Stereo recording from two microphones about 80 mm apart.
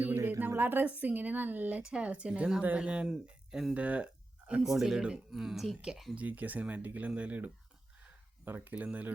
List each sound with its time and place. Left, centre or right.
0.0 s speech: right; by 3.8 s centre
3.8 s a sound: centre
4.6 s speech: centre
6.1 s speech: centre